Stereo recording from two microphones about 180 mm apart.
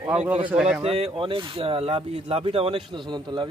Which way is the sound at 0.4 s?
5° right (ahead or behind).